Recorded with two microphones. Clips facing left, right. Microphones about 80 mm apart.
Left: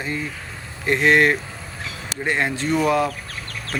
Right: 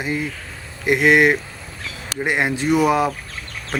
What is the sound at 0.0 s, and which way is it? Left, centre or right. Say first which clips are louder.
Speech: right 3 dB; centre.